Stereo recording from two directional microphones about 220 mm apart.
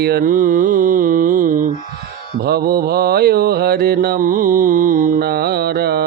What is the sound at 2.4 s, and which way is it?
Mantra, 45° right (ahead or behind).